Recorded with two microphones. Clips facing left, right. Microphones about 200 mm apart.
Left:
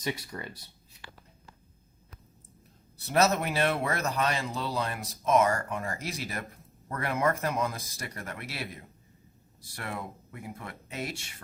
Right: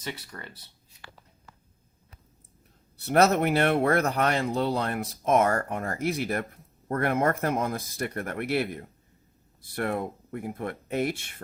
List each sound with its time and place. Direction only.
0.0 s speech: 15° left (ahead or behind)
3.1 s speech: 60° right (ahead or behind)